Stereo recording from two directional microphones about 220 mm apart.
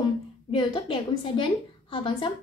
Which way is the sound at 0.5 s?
20° left (ahead or behind).